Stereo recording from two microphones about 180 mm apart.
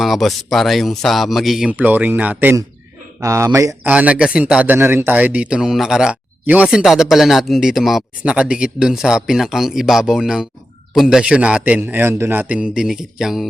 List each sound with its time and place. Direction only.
0.0 s a man's voice: centre (ahead or behind)